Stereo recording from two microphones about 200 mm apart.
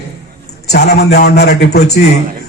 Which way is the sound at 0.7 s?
55° left (ahead or behind).